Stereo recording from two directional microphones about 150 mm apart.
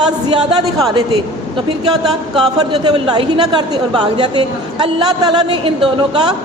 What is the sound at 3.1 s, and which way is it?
A woman's voice, 30° right (ahead or behind).